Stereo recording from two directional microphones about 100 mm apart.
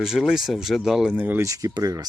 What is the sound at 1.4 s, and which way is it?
Speech, 35° right (ahead or behind).